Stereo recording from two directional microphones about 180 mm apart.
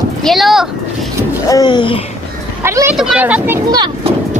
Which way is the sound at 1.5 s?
25° left (ahead or behind).